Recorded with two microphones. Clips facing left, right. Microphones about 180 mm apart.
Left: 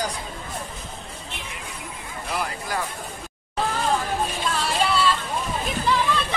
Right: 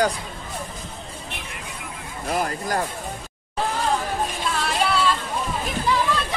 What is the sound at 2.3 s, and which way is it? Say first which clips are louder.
Speech: right 4 dB; 45° right (ahead or behind).